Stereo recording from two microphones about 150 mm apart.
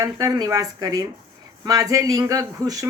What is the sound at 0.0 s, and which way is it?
A woman's voice, 25° right (ahead or behind).